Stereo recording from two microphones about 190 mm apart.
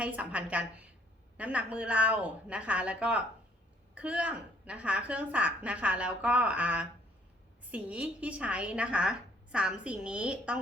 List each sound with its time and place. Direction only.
0.0 s a woman's voice: 5° right (ahead or behind)